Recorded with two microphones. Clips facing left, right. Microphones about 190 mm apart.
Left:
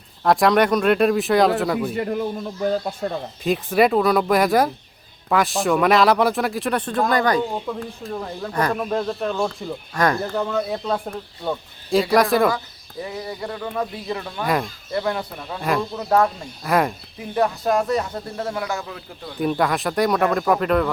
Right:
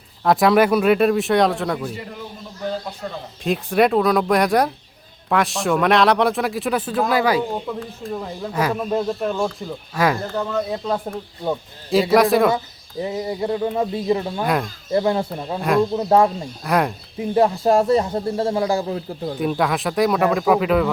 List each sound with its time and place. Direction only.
0.3 s a man's voice: centre (ahead or behind)
1.9 s a man's voice: 55° left (ahead or behind)
3.4 s a man's voice: centre (ahead or behind)
12.1 s a man's voice: centre (ahead or behind)
13.0 s a man's voice: 25° right (ahead or behind)
14.4 s a man's voice: centre (ahead or behind)
14.9 s a man's voice: 25° right (ahead or behind)
16.6 s a man's voice: centre (ahead or behind)
17.3 s a man's voice: 30° right (ahead or behind)
19.4 s a man's voice: centre (ahead or behind)